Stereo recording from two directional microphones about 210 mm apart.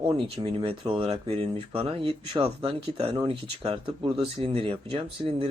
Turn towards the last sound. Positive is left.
turn(degrees=-25)  # may be behind; listen again after turning